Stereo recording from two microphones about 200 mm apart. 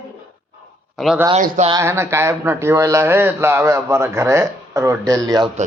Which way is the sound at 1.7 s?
15° right (ahead or behind).